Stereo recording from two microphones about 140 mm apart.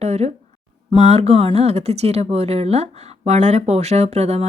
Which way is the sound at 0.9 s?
50° right (ahead or behind).